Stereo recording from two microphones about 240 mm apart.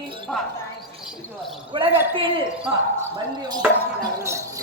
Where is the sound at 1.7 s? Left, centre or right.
Right.